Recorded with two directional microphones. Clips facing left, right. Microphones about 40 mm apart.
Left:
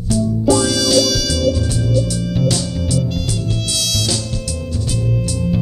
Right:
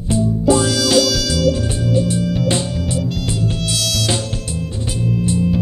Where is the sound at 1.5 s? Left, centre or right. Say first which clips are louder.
Right 1 dB; right.